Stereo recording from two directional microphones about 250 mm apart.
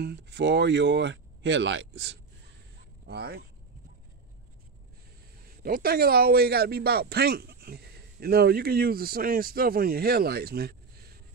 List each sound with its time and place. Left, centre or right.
0.0 s a man's voice: right
5.6 s a man's voice: right